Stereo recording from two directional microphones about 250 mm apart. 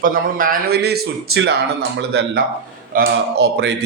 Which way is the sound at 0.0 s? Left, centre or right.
Right.